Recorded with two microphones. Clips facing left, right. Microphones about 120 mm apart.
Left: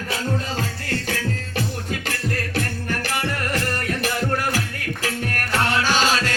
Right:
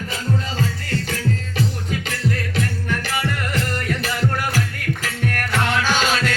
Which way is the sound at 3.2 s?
45° left (ahead or behind).